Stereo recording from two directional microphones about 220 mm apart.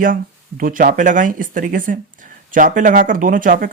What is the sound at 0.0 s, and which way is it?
Speech, 40° right (ahead or behind).